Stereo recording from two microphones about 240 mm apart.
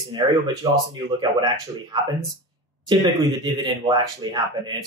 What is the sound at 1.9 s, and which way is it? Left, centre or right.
Speech, centre.